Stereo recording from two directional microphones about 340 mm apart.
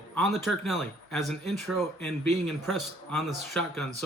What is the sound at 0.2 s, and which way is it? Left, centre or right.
Speech, centre.